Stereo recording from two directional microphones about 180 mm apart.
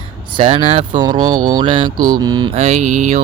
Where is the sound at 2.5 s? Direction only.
35° right (ahead or behind).